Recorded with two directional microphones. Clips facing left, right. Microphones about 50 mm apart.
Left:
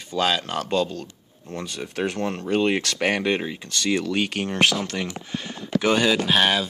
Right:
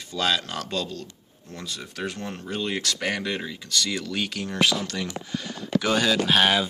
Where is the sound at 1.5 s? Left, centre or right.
Left.